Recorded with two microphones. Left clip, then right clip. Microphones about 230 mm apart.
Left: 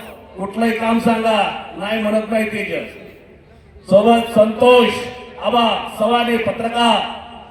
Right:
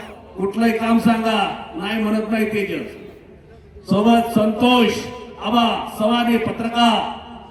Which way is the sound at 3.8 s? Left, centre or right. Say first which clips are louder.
Left 5 dB; right.